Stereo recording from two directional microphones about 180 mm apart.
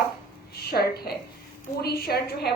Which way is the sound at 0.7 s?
60° left (ahead or behind).